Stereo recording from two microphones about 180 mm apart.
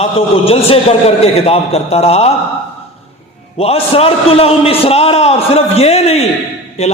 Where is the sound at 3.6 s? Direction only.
35° left (ahead or behind).